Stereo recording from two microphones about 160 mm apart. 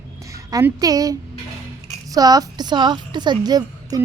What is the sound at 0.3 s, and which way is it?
A woman's voice, 20° right (ahead or behind).